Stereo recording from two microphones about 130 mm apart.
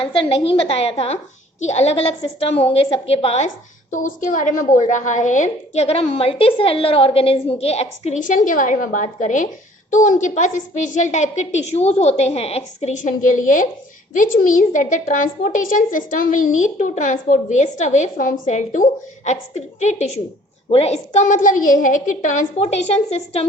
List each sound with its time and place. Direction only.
0.0 s a woman's voice: 40° left (ahead or behind)
4.0 s a woman's voice: 90° left; by 20.1 s 65° left (ahead or behind)
20.7 s a woman's voice: 50° left (ahead or behind)